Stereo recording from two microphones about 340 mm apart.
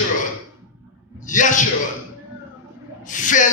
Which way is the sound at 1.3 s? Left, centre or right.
Left.